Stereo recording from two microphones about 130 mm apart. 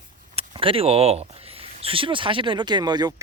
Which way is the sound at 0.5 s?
40° right (ahead or behind).